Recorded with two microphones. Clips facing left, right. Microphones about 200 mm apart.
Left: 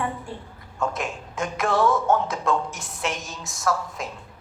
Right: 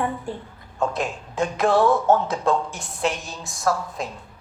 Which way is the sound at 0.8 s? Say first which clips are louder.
Right 3 dB; 35° right (ahead or behind).